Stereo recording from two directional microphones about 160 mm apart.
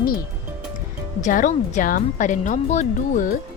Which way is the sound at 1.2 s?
55° left (ahead or behind).